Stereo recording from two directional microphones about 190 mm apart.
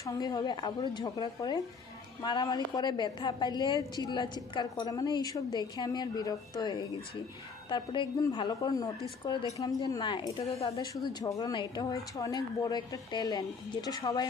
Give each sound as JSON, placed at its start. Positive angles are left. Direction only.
{"t": 0.0, "sound": "speech", "side_deg": 20}